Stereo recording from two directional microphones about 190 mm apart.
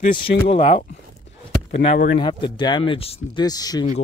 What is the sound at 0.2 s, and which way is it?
Speech, 30° left (ahead or behind).